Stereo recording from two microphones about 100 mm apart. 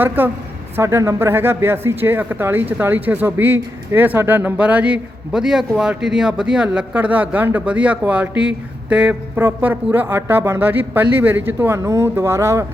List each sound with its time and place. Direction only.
0.2 s speech: 20° right (ahead or behind)